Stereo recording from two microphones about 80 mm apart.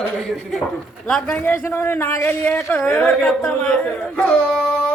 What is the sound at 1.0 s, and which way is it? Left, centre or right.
Speech, centre.